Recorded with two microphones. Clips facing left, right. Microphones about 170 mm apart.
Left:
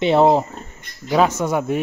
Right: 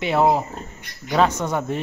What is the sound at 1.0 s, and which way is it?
Speech, 10° left (ahead or behind).